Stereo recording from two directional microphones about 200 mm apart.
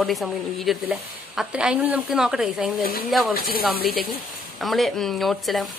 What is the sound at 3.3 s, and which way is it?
Speech, 45° left (ahead or behind).